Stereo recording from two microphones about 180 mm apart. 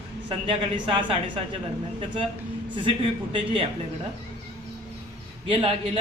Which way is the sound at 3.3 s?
30° right (ahead or behind).